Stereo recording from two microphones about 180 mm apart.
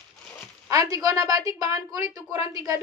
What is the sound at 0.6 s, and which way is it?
A woman's voice, 20° right (ahead or behind).